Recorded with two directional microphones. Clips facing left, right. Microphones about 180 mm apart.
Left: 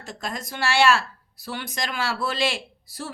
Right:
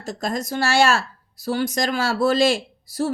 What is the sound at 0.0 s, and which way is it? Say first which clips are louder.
A woman's voice: right 7 dB; 40° right (ahead or behind).